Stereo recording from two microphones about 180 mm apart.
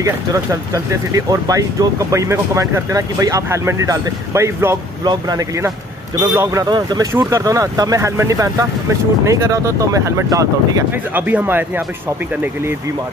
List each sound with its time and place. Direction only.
0.0 s speech: 20° right (ahead or behind)